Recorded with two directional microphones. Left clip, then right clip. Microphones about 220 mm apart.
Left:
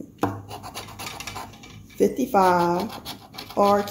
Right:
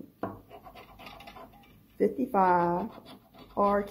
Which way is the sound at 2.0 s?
20° right (ahead or behind).